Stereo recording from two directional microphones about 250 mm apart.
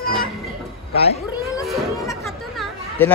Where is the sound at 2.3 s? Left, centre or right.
Centre.